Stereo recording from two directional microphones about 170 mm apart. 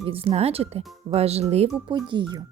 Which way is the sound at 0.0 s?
35° right (ahead or behind).